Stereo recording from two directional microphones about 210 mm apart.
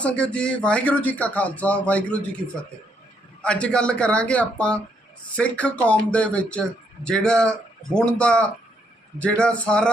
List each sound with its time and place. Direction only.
0.0 s a man's voice: 5° left (ahead or behind)
3.4 s speech: 5° left (ahead or behind)